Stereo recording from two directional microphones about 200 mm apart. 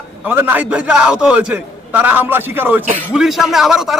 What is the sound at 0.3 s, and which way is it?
A man's voice, 10° right (ahead or behind).